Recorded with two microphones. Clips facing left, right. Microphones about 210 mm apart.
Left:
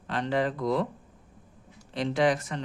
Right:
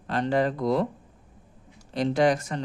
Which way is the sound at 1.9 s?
40° right (ahead or behind).